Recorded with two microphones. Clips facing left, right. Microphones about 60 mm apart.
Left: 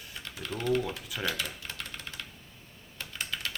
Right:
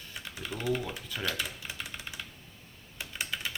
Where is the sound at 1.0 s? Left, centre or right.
Centre.